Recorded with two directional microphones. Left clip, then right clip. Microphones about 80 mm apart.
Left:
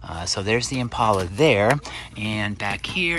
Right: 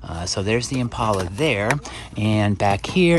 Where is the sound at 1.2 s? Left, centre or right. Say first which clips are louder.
Left 3 dB; centre.